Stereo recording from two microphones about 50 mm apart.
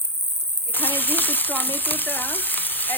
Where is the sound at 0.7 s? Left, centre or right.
Left.